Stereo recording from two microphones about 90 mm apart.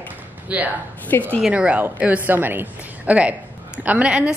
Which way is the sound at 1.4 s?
15° right (ahead or behind).